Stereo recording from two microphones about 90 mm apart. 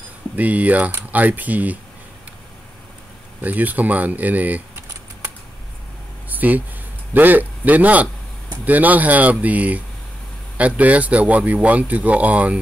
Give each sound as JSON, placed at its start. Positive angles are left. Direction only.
{"t": 0.4, "sound": "speech", "side_deg": -15}
{"t": 3.3, "sound": "speech", "side_deg": -20}
{"t": 6.2, "sound": "a sound", "side_deg": -20}
{"t": 7.2, "sound": "speech", "side_deg": -20}